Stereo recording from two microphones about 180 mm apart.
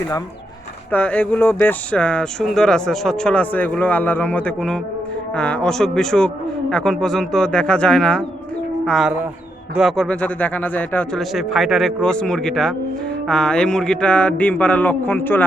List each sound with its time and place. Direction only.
0.9 s speech: 5° left (ahead or behind)